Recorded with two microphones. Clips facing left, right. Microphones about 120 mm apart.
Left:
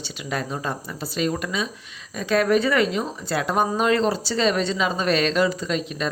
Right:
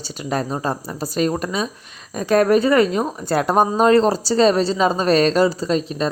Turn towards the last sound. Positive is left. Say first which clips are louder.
# right 6 dB
turn(degrees=-35)  # may be behind; listen again after turning